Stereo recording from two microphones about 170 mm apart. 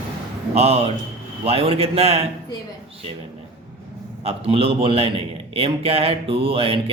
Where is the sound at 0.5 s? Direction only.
35° right (ahead or behind).